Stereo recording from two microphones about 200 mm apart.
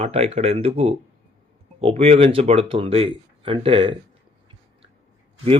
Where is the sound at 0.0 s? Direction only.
30° right (ahead or behind).